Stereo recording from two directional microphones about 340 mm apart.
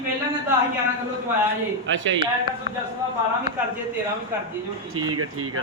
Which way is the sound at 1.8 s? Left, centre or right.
Right.